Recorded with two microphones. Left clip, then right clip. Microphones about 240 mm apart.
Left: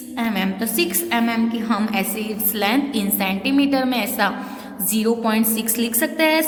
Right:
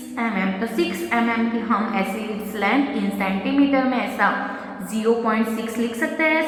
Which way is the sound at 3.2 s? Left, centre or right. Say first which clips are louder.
Left 1 dB; left.